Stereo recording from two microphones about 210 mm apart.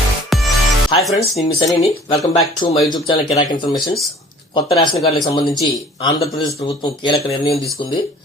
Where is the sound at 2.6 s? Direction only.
20° left (ahead or behind).